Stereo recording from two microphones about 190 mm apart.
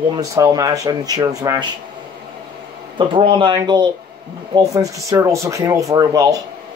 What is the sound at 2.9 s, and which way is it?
Speech, 25° right (ahead or behind).